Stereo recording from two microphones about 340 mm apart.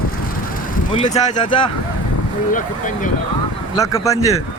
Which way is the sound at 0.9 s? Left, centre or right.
Centre.